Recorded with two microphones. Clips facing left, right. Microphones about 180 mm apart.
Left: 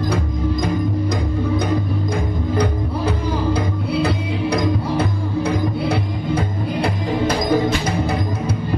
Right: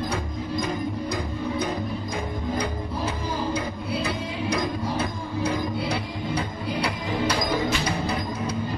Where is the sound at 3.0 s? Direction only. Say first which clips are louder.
Left 7 dB; 65° left (ahead or behind); by 7.6 s 45° left (ahead or behind).